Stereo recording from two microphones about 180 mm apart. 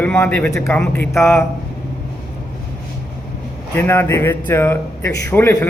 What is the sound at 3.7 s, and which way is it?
A man's voice, 15° left (ahead or behind).